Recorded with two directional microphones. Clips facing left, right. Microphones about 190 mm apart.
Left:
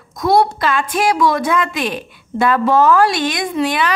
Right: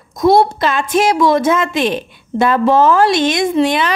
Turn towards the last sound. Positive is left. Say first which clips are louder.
# right 4 dB
turn(degrees=-25)  # may be behind; listen again after turning